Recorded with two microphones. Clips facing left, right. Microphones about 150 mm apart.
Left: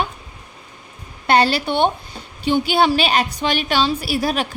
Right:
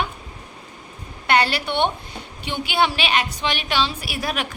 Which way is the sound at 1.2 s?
35° left (ahead or behind).